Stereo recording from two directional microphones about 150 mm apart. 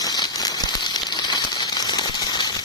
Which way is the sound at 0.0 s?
25° left (ahead or behind).